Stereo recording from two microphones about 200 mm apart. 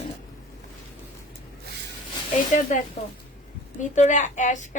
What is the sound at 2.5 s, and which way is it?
Speech, 40° left (ahead or behind).